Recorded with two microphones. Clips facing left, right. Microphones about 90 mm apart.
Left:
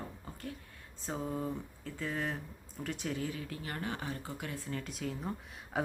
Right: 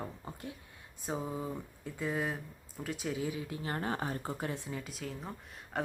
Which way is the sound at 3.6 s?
35° right (ahead or behind).